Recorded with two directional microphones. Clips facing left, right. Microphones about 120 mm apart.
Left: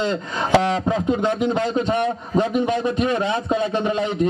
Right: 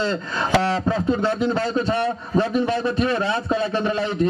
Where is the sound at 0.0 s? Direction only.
20° left (ahead or behind).